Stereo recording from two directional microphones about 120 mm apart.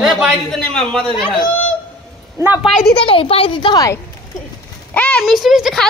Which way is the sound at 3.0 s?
50° left (ahead or behind).